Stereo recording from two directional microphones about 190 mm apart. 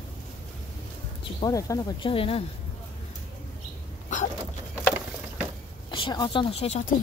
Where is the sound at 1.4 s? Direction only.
15° left (ahead or behind).